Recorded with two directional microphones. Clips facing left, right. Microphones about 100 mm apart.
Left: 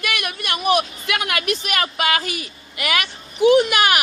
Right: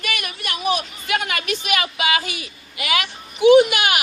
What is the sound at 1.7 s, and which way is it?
Speech, 45° left (ahead or behind).